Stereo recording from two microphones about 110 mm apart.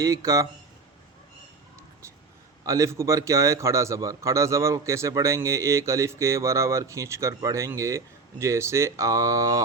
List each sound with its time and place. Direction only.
0.0 s a man's voice: 30° right (ahead or behind)
2.6 s a man's voice: 30° right (ahead or behind)